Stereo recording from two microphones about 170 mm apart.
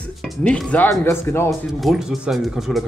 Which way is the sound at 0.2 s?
5° left (ahead or behind).